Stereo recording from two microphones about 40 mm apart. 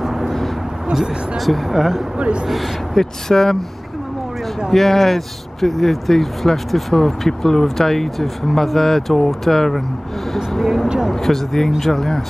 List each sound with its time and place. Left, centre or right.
0.0 s vehicle: centre
0.9 s speech: centre
1.4 s speech: centre
2.1 s speech: right
2.4 s speech: centre
3.0 s speech: centre
4.6 s speech: centre